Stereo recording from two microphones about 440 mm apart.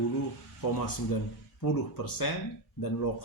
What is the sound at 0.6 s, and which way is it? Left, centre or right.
A man's voice, left.